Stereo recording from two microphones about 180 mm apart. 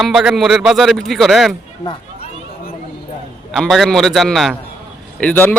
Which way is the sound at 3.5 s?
Centre (ahead or behind).